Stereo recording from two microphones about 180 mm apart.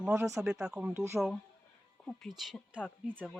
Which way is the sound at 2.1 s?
Centre (ahead or behind).